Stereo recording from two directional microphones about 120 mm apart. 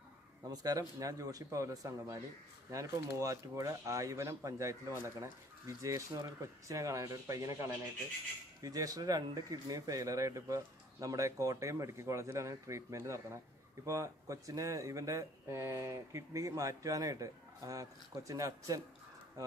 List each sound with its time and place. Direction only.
0.5 s speech: 30° right (ahead or behind)